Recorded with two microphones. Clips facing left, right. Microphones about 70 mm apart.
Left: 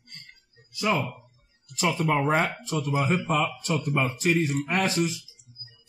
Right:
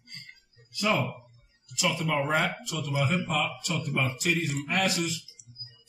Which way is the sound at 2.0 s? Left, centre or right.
Centre.